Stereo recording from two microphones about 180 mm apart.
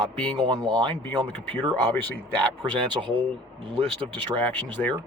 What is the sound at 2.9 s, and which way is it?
Speech, 25° right (ahead or behind).